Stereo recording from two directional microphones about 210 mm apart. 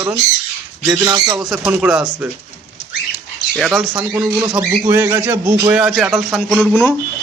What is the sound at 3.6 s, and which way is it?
Speech, centre (ahead or behind).